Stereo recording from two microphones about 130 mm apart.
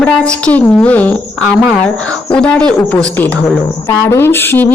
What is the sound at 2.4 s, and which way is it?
Speech, 5° left (ahead or behind).